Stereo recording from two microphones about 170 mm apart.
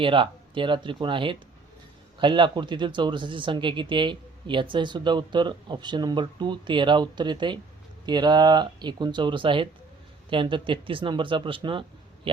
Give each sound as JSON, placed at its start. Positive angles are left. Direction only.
{"t": 0.0, "sound": "speech", "side_deg": -30}